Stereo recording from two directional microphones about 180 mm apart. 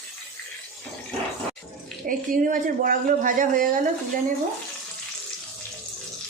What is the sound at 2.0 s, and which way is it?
Speech, 50° right (ahead or behind).